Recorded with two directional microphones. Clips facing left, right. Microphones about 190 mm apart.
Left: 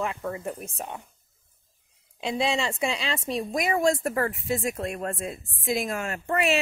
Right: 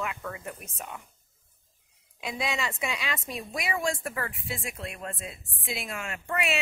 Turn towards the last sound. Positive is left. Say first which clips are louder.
# left 6 dB
turn(degrees=40)  # may be behind; listen again after turning